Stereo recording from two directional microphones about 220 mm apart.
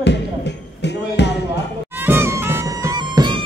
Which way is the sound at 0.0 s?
50° left (ahead or behind).